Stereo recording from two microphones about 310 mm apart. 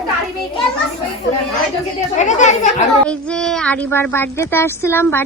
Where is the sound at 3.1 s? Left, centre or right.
Centre.